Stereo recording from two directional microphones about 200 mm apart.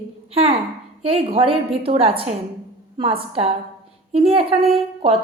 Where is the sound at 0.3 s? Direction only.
30° right (ahead or behind).